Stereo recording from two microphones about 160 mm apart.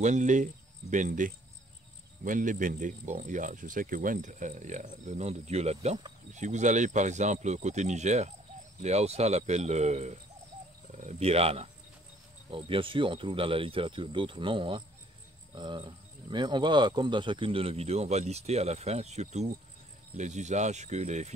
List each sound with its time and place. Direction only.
0.0 s speech: 50° right (ahead or behind)